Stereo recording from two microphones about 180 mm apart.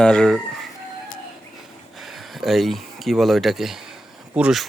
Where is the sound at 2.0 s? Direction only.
Centre (ahead or behind).